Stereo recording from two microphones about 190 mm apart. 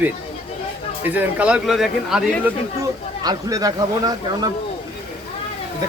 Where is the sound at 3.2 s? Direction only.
20° right (ahead or behind).